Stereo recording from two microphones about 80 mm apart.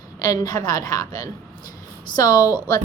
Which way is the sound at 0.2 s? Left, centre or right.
Left.